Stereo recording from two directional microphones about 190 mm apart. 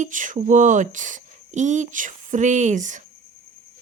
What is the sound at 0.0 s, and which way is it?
Speech, 45° right (ahead or behind).